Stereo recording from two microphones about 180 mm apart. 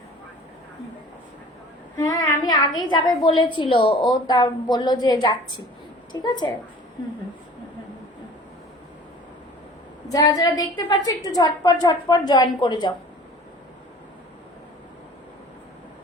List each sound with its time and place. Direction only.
2.0 s child singing: 15° left (ahead or behind)
2.7 s a woman's voice: 20° left (ahead or behind)
10.1 s a woman's voice: 20° left (ahead or behind)